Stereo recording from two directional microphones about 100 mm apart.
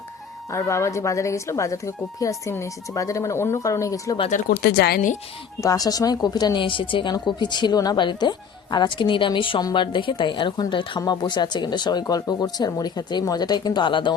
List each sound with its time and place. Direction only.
0.5 s speech: 30° left (ahead or behind)
5.6 s a woman's voice: 40° left (ahead or behind)